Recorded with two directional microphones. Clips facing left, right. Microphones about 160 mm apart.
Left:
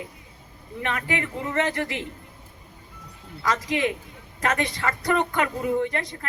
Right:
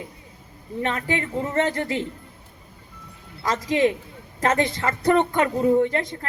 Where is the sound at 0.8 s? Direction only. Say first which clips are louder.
Right 3 dB; 30° right (ahead or behind).